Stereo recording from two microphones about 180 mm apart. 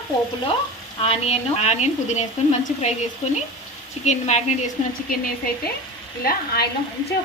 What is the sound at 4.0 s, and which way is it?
Speech, 40° left (ahead or behind).